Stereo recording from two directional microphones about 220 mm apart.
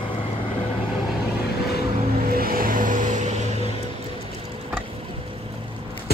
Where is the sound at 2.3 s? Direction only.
40° right (ahead or behind).